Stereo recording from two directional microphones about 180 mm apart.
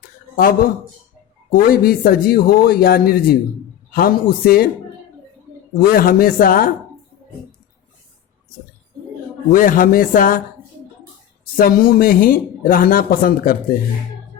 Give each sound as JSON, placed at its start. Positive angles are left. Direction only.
{"t": 0.3, "sound": "a man's voice", "side_deg": 50}
{"t": 5.9, "sound": "speech", "side_deg": 55}
{"t": 9.5, "sound": "speech", "side_deg": 50}
{"t": 11.5, "sound": "speech", "side_deg": 50}